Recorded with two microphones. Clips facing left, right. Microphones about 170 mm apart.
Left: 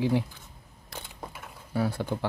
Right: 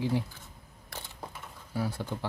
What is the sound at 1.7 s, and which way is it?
Speech, 65° left (ahead or behind).